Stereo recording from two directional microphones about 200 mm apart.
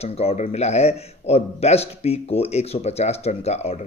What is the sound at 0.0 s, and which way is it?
A man's voice, 30° left (ahead or behind).